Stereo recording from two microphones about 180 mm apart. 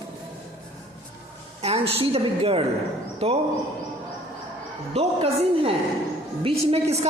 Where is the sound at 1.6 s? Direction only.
30° right (ahead or behind).